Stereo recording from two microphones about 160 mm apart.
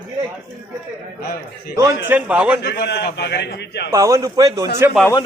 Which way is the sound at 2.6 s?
90° left.